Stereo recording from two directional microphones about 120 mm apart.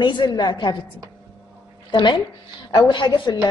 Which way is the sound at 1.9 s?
40° left (ahead or behind).